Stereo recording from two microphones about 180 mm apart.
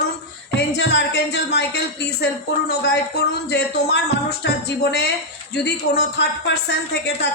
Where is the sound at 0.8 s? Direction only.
70° left (ahead or behind).